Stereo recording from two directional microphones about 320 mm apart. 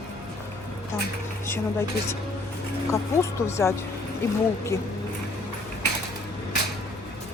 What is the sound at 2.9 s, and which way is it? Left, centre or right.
Speech, centre.